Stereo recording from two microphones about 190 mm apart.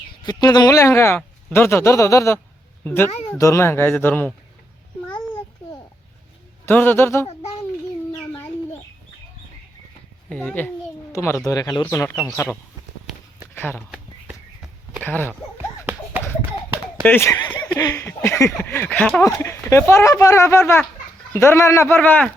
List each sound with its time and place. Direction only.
0.2 s speech: 20° left (ahead or behind)
6.7 s speech: 10° left (ahead or behind)
8.1 s bird: 15° left (ahead or behind)
10.2 s speech: 5° left (ahead or behind)
13.6 s speech: 5° left (ahead or behind)
14.3 s walk: 5° right (ahead or behind)
15.0 s speech: 10° left (ahead or behind)
17.0 s speech: 10° left (ahead or behind)